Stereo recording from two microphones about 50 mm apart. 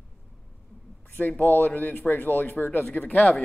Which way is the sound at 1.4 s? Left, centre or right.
Left.